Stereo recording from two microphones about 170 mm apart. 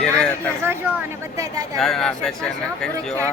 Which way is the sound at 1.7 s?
Centre (ahead or behind).